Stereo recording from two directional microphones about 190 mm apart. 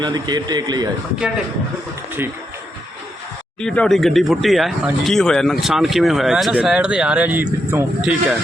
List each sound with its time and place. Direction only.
0.0 s a man's voice: 20° right (ahead or behind)
3.6 s speech: 5° left (ahead or behind)